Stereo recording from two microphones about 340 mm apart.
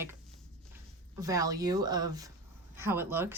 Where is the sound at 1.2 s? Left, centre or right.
Centre.